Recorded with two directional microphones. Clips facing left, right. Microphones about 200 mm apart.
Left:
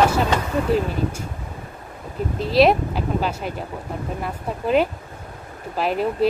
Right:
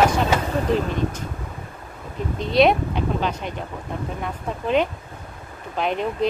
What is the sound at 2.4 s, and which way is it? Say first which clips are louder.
Speech: left 1 dB; centre (ahead or behind).